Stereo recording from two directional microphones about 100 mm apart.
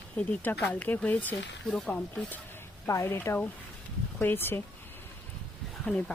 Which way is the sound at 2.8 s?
30° left (ahead or behind).